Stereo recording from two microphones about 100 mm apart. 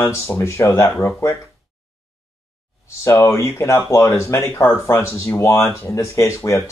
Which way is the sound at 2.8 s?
30° left (ahead or behind).